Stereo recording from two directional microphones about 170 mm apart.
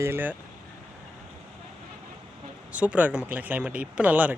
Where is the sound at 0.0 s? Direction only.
10° right (ahead or behind).